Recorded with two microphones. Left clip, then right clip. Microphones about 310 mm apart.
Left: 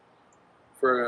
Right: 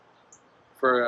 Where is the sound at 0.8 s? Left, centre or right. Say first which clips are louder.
Right 1 dB; centre.